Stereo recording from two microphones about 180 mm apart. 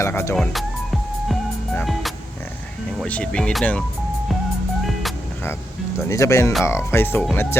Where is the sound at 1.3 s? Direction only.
Centre (ahead or behind).